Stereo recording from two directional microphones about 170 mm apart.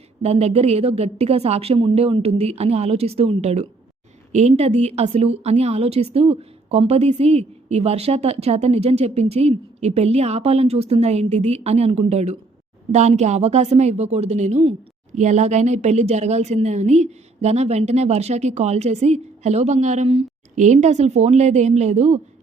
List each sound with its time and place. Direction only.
0.2 s a woman's voice: 40° right (ahead or behind)